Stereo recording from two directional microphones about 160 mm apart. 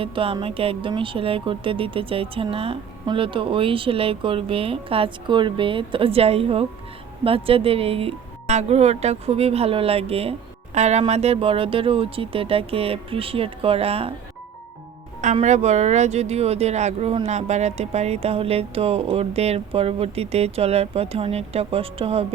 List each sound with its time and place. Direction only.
0.0 s speech: 35° right (ahead or behind)
15.2 s speech: 50° right (ahead or behind)